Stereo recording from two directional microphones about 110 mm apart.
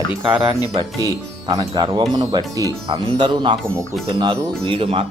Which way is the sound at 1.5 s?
40° right (ahead or behind).